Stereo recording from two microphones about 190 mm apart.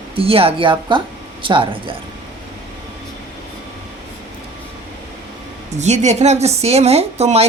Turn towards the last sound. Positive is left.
turn(degrees=-35)  # may be behind; listen again after turning